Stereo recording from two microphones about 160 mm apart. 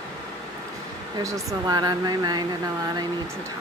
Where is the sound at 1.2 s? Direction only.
20° right (ahead or behind).